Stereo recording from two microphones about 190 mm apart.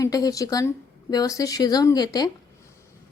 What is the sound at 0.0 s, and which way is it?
A woman's voice, 20° left (ahead or behind).